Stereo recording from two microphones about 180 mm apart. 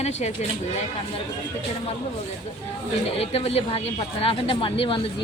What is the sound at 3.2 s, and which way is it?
A woman's voice, 35° left (ahead or behind).